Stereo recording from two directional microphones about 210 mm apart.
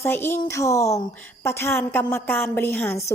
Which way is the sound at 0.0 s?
10° left (ahead or behind).